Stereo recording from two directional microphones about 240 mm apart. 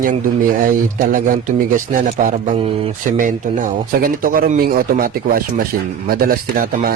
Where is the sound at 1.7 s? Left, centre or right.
Right.